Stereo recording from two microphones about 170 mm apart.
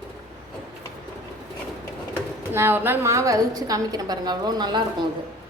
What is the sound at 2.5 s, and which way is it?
A woman's voice, 15° right (ahead or behind).